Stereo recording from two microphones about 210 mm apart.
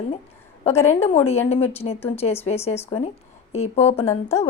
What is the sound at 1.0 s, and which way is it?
Speech, 30° left (ahead or behind).